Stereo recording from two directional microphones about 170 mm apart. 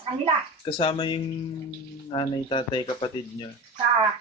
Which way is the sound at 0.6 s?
30° left (ahead or behind).